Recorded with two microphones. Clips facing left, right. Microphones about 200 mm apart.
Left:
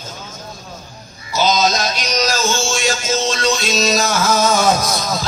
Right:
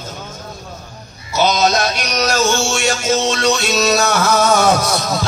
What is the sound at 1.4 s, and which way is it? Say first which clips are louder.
Music: right 2 dB; 60° right (ahead or behind).